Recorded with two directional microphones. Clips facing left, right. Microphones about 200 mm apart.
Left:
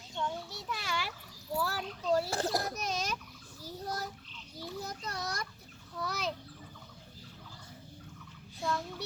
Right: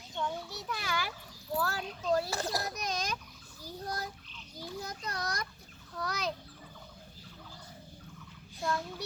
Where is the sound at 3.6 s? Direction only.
5° left (ahead or behind).